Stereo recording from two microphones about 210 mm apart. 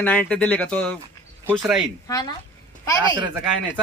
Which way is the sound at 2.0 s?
15° left (ahead or behind).